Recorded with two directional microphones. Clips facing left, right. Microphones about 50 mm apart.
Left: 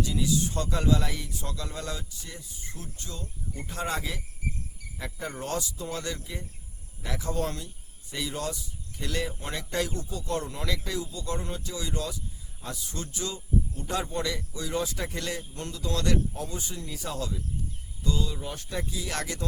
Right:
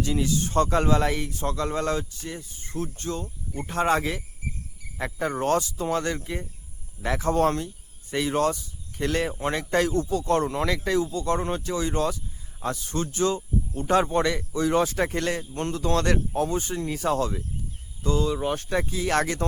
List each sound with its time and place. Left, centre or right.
0.0 s speech: right